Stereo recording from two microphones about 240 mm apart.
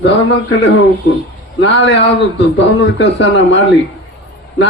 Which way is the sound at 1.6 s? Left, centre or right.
Left.